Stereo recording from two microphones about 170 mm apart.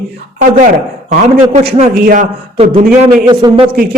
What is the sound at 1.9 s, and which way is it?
Speech, 55° right (ahead or behind).